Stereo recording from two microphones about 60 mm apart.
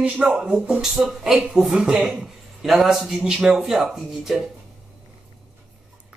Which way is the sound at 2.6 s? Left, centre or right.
Centre.